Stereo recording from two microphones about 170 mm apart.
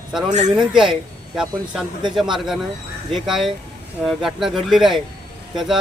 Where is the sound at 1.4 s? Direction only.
5° right (ahead or behind).